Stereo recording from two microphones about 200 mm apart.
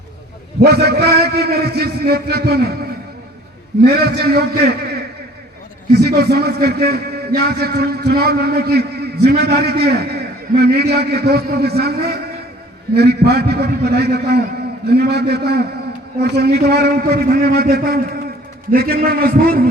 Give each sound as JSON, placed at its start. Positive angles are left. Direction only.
{"t": 0.6, "sound": "a man's voice", "side_deg": -50}
{"t": 3.8, "sound": "a man's voice", "side_deg": -50}
{"t": 5.9, "sound": "a man's voice", "side_deg": -50}